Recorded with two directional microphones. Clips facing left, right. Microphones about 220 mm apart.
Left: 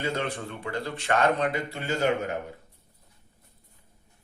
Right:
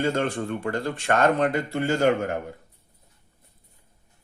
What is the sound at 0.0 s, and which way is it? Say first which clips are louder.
Speech: right 6 dB; 50° right (ahead or behind).